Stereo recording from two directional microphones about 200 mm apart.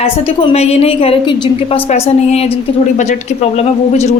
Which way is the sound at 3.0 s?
35° left (ahead or behind).